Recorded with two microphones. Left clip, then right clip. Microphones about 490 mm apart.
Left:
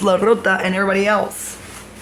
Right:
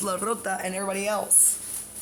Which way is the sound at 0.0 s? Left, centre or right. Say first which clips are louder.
Left 13 dB; right.